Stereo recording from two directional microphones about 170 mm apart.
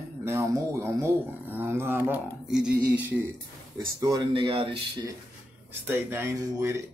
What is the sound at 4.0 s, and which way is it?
Speech, 20° right (ahead or behind).